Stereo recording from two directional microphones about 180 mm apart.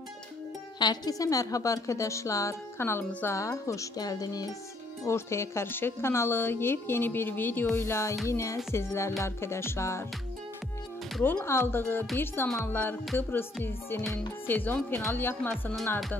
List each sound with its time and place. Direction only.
0.7 s speech: 25° left (ahead or behind)
11.2 s speech: 15° left (ahead or behind)